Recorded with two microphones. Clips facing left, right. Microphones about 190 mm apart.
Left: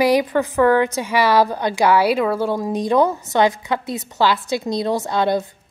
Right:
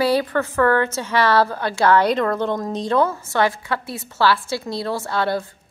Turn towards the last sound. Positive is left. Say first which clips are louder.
# left 3 dB
turn(degrees=20)  # may be behind; listen again after turning